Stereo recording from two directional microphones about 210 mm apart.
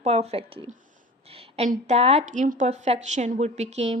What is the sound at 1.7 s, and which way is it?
Speech, 30° right (ahead or behind).